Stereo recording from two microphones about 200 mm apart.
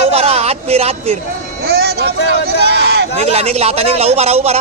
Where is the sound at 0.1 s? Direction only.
30° right (ahead or behind).